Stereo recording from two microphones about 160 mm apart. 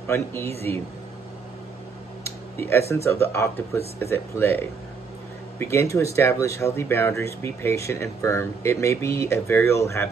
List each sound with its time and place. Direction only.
0.0 s a man's voice: 15° left (ahead or behind)
0.5 s speech: 40° right (ahead or behind)
2.2 s a sound: 15° left (ahead or behind)
2.9 s speech: 15° left (ahead or behind)